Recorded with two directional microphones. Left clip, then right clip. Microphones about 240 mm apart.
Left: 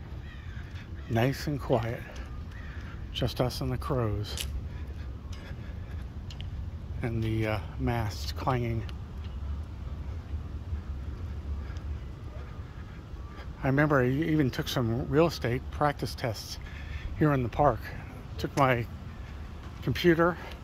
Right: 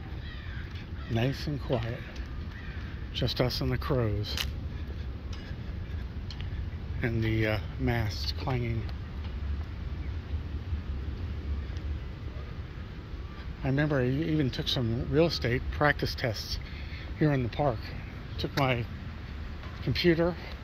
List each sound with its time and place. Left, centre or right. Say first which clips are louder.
1.1 s speech: left 3 dB; centre
3.2 s speech: right 1 dB; centre
7.0 s speech: right 3 dB; centre
13.6 s speech: left 4 dB; centre